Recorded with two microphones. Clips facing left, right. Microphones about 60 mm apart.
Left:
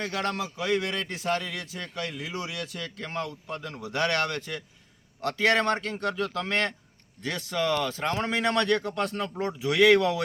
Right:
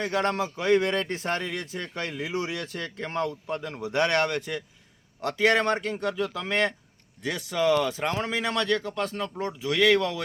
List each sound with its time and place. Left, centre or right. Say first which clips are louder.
0.0 s a man's voice: right 4 dB; right
3.6 s a man's voice: right 2 dB; right
8.1 s speech: left 2 dB; centre